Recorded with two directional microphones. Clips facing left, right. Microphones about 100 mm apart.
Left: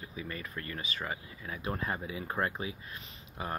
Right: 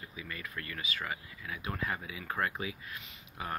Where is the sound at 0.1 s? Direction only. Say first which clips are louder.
Left 3 dB; 30° left (ahead or behind).